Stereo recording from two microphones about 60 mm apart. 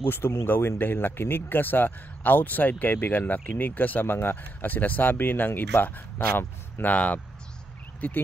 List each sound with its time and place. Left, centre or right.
0.1 s speech: left